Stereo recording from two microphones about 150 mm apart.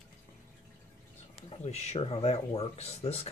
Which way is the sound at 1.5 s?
45° left (ahead or behind).